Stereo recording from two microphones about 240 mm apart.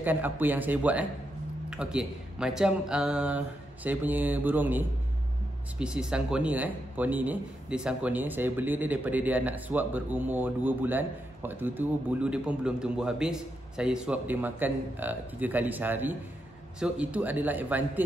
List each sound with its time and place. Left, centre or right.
0.0 s a man's voice: centre